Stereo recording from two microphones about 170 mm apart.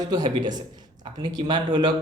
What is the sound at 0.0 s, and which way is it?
A man's voice, 25° right (ahead or behind).